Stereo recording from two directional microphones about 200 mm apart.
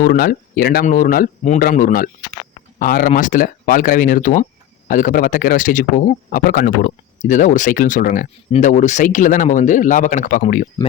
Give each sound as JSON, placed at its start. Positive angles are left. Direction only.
{"t": 0.0, "sound": "speech", "side_deg": 45}